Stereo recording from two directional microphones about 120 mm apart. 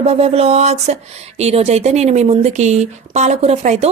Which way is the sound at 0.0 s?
60° right (ahead or behind).